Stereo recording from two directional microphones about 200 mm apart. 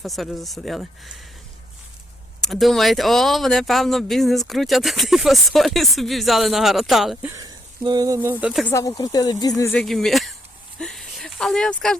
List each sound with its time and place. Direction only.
0.0 s speech: centre (ahead or behind)
2.5 s speech: centre (ahead or behind)
8.6 s speech: 15° left (ahead or behind)
9.7 s speech: centre (ahead or behind)
10.8 s a sound: centre (ahead or behind)